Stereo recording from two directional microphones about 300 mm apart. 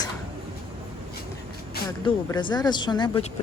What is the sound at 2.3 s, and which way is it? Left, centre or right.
Speech, centre.